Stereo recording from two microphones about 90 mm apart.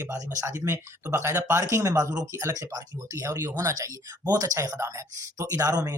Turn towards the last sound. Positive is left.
turn(degrees=-45)  # may be behind; listen again after turning